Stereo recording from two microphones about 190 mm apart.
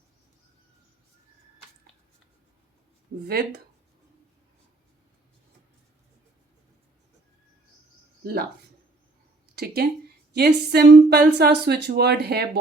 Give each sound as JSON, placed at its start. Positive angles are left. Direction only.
{"t": 3.2, "sound": "speech", "side_deg": -55}
{"t": 8.2, "sound": "speech", "side_deg": -55}
{"t": 10.3, "sound": "speech", "side_deg": -60}